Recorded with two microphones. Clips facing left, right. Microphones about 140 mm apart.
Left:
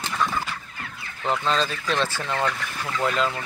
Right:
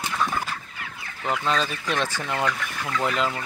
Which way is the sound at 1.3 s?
10° right (ahead or behind).